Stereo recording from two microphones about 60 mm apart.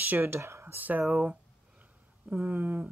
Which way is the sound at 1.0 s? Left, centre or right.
Centre.